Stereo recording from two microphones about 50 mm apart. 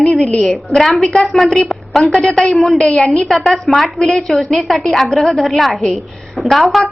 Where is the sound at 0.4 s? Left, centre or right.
Centre.